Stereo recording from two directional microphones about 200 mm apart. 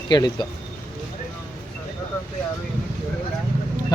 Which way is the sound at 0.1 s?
20° left (ahead or behind).